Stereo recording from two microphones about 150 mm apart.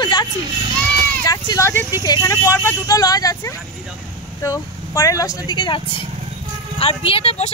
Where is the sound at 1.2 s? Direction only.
20° left (ahead or behind).